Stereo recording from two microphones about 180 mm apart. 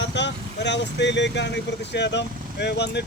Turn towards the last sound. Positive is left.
turn(degrees=70)  # may be behind; listen again after turning